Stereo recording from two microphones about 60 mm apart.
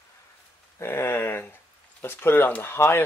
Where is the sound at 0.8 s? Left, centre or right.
Left.